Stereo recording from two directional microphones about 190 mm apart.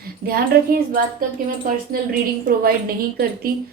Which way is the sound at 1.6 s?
50° right (ahead or behind).